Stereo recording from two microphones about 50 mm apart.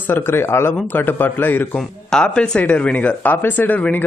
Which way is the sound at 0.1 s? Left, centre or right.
Left.